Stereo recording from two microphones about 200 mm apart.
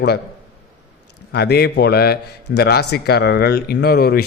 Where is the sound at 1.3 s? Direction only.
55° left (ahead or behind).